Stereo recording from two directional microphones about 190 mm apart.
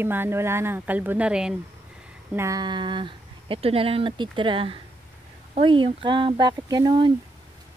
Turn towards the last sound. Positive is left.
turn(degrees=-25)  # may be behind; listen again after turning